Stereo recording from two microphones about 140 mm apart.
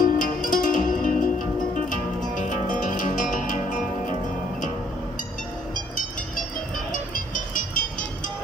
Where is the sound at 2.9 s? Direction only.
70° left (ahead or behind).